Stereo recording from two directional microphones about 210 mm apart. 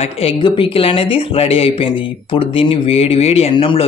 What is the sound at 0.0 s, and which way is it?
Speech, 25° left (ahead or behind).